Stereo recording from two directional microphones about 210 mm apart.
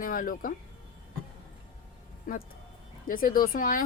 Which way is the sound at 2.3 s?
40° left (ahead or behind).